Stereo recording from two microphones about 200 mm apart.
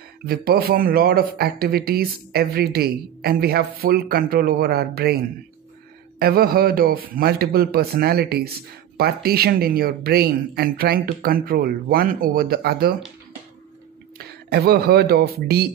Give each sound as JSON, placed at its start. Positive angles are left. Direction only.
{"t": 0.3, "sound": "a man's voice", "side_deg": -50}
{"t": 14.1, "sound": "speech", "side_deg": -50}